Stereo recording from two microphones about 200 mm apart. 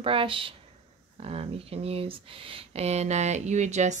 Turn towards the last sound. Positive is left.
turn(degrees=-35)  # may be behind; listen again after turning